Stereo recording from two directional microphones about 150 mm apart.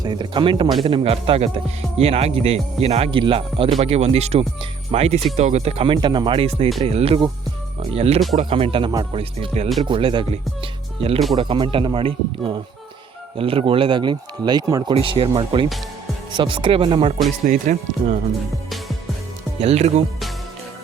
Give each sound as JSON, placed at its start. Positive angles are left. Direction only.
{"t": 0.0, "sound": "speech", "side_deg": -30}
{"t": 9.1, "sound": "speech", "side_deg": -40}
{"t": 14.9, "sound": "speech", "side_deg": -35}
{"t": 17.4, "sound": "speech", "side_deg": -60}
{"t": 19.5, "sound": "speech", "side_deg": -45}